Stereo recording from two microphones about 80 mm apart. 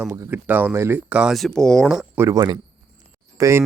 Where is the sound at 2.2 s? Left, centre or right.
Right.